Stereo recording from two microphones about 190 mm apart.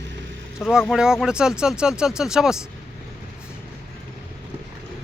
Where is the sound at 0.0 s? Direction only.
75° right (ahead or behind).